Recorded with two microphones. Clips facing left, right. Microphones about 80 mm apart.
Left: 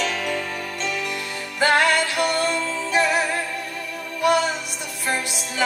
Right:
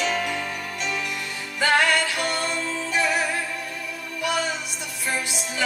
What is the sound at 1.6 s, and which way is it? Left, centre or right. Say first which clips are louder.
Music: left 2 dB; left.